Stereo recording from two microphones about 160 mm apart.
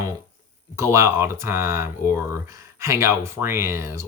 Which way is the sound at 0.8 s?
15° right (ahead or behind).